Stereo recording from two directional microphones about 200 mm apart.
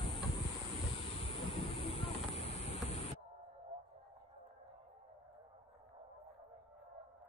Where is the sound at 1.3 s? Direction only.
30° left (ahead or behind).